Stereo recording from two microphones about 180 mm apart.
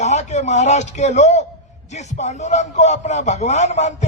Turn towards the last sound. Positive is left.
turn(degrees=40)  # may be behind; listen again after turning